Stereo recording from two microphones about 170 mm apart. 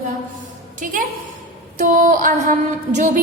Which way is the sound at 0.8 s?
50° right (ahead or behind).